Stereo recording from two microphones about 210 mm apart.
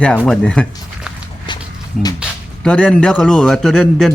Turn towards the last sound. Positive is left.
turn(degrees=0)  # may be behind; listen again after turning